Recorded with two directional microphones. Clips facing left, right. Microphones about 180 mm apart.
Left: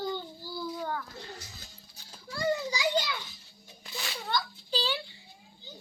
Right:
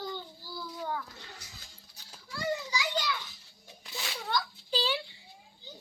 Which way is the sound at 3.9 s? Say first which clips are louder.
Even; 5° right (ahead or behind).